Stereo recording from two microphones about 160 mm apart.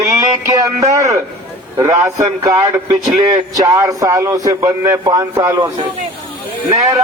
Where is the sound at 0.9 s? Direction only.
20° right (ahead or behind).